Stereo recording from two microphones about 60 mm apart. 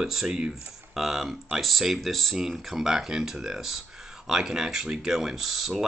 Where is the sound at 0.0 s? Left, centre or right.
Centre.